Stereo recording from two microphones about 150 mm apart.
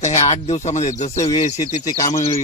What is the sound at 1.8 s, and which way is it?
Speech, 20° left (ahead or behind).